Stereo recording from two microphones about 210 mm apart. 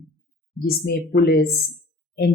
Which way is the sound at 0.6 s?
50° left (ahead or behind).